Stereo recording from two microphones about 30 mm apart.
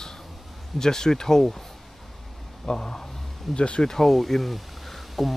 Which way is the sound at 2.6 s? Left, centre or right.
Centre.